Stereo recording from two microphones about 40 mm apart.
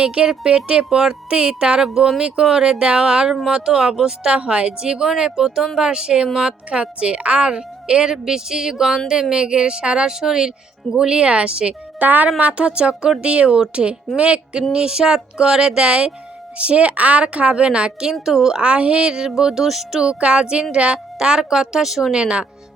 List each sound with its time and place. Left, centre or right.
0.0 s a woman's voice: right
1.8 s a woman's voice: centre
11.9 s speech: right
12.4 s a woman's voice: right
18.1 s speech: centre
18.5 s a woman's voice: right
20.1 s a woman's voice: right; by 22.1 s centre
22.1 s a woman's voice: right